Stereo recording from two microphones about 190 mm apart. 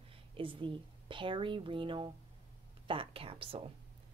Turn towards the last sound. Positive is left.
turn(degrees=-30)  # may be behind; listen again after turning